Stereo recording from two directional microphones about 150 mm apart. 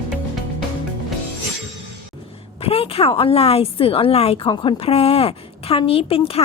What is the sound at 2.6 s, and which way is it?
A woman's voice, 40° left (ahead or behind).